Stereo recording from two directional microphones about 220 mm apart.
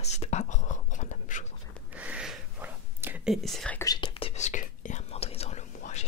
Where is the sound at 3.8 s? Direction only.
20° left (ahead or behind).